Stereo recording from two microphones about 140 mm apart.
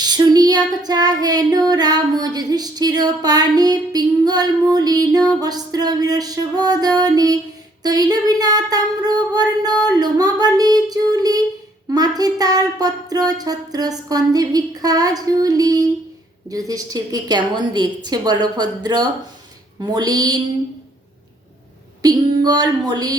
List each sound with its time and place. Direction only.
0.0 s child singing: 30° right (ahead or behind)
16.5 s a woman's voice: 25° right (ahead or behind)
19.8 s child singing: 30° right (ahead or behind)
22.0 s child singing: 30° right (ahead or behind)